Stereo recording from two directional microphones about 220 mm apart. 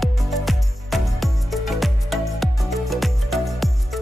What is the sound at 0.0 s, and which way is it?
Music, centre (ahead or behind).